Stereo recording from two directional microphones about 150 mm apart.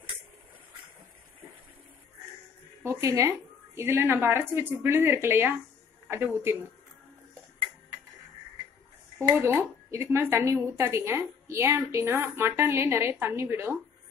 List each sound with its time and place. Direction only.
2.8 s a woman's voice: 20° right (ahead or behind)
9.4 s a woman's voice: 15° right (ahead or behind)